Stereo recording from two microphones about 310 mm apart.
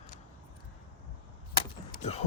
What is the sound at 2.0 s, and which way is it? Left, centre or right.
Speech, left.